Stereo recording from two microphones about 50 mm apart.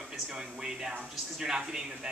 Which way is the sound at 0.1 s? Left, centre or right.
Centre.